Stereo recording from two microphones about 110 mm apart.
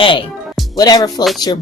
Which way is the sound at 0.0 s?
50° left (ahead or behind).